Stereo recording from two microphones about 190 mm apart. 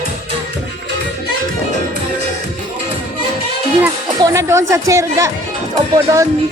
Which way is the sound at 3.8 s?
15° right (ahead or behind).